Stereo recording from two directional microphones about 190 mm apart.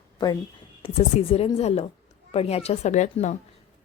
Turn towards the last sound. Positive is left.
turn(degrees=40)  # may be behind; listen again after turning